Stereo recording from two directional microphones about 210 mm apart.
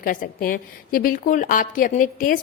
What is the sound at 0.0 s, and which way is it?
A woman's voice, 40° left (ahead or behind).